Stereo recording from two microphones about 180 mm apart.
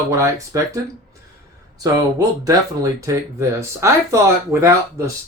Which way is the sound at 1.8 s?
20° right (ahead or behind).